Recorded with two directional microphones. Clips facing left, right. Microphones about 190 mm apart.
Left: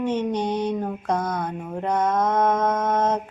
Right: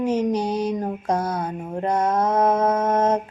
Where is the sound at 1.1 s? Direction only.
10° right (ahead or behind).